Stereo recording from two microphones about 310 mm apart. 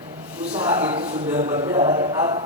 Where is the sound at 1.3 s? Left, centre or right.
Centre.